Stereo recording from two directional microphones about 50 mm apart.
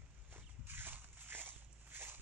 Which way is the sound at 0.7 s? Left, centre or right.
Right.